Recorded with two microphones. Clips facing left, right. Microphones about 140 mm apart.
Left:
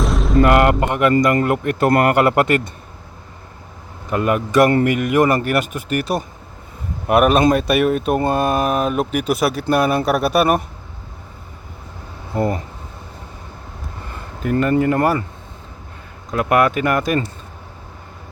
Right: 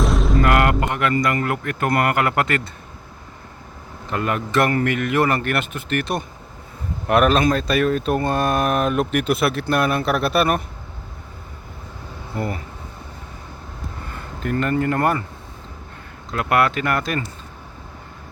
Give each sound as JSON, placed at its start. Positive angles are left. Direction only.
{"t": 0.0, "sound": "artillery fire", "side_deg": 0}
{"t": 0.4, "sound": "a sound", "side_deg": 25}
{"t": 1.5, "sound": "a man's voice", "side_deg": 25}
{"t": 4.1, "sound": "speech", "side_deg": 10}
{"t": 12.3, "sound": "a man's voice", "side_deg": 25}
{"t": 14.7, "sound": "speech", "side_deg": 15}
{"t": 16.3, "sound": "speech", "side_deg": 15}